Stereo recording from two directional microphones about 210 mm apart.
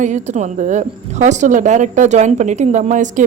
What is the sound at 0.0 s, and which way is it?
A woman's voice, 35° right (ahead or behind).